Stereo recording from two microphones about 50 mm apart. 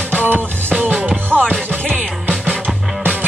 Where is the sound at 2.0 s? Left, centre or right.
Right.